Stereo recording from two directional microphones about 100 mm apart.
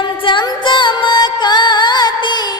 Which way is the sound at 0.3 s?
50° left (ahead or behind).